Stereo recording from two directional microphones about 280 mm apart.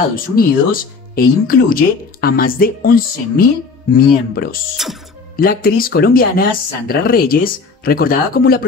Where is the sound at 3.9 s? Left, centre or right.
Left.